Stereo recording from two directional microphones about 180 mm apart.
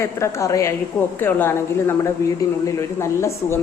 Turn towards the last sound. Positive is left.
turn(degrees=15)  # may be behind; listen again after turning